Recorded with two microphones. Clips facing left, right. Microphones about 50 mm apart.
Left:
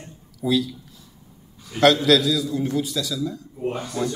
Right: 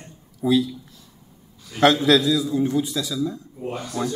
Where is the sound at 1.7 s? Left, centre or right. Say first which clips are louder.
Even; right.